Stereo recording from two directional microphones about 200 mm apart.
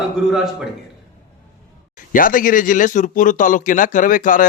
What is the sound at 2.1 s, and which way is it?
A man's voice, 45° left (ahead or behind).